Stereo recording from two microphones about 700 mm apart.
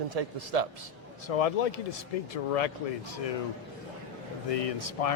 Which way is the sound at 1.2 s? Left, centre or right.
Left.